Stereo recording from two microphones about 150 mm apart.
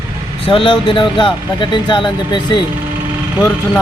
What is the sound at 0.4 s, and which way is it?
Speech, 35° left (ahead or behind).